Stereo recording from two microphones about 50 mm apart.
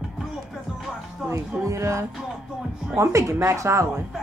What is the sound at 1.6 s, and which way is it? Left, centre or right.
Speech, right.